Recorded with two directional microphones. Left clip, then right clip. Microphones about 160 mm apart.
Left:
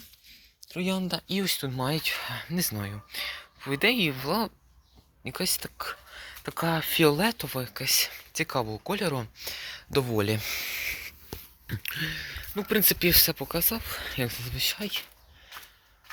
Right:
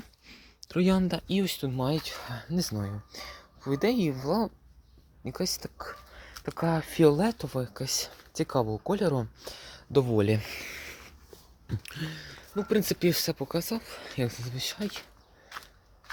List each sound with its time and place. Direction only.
0.3 s a sound: 85° right
1.3 s speech: 25° right (ahead or behind)
1.5 s speech: 10° right (ahead or behind)
4.1 s speech: centre (ahead or behind)
5.2 s speech: 5° right (ahead or behind)
5.6 s speech: 10° left (ahead or behind)
5.9 s speech: 5° right (ahead or behind); by 11.1 s 30° right (ahead or behind)
11.6 s a sound: 10° right (ahead or behind)
12.5 s speech: centre (ahead or behind)
13.8 s speech: centre (ahead or behind)
14.3 s speech: 15° right (ahead or behind)